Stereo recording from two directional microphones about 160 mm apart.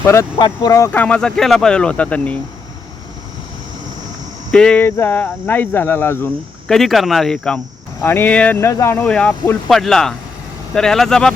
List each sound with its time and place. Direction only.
0.0 s speech: 15° left (ahead or behind)
0.9 s speech: 5° left (ahead or behind)
4.5 s speech: 5° left (ahead or behind)
6.7 s speech: centre (ahead or behind)